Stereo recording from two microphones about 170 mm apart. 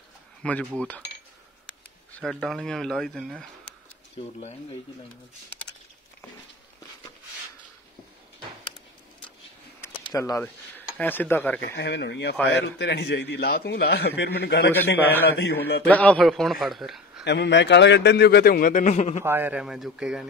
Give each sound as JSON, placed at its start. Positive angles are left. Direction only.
{"t": 0.4, "sound": "speech", "side_deg": 5}
{"t": 2.1, "sound": "speech", "side_deg": 5}
{"t": 10.0, "sound": "speech", "side_deg": 20}
{"t": 11.6, "sound": "a man's voice", "side_deg": 85}
{"t": 15.9, "sound": "speech", "side_deg": 10}
{"t": 17.2, "sound": "a man's voice", "side_deg": 90}
{"t": 19.2, "sound": "speech", "side_deg": -10}